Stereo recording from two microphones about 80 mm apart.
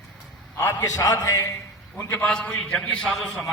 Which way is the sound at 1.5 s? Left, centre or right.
Left.